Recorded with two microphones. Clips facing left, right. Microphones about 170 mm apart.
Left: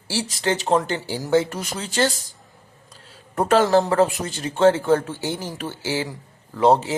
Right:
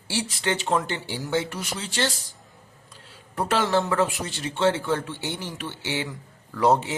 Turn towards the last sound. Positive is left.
turn(degrees=25)  # may be behind; listen again after turning